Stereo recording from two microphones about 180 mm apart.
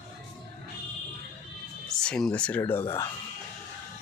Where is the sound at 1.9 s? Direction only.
5° left (ahead or behind).